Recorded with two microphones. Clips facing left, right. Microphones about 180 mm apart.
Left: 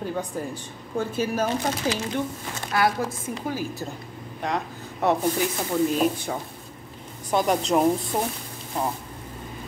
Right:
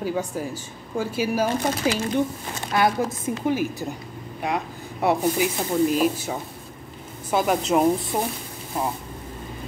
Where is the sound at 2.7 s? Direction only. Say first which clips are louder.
Right 2 dB; 20° right (ahead or behind).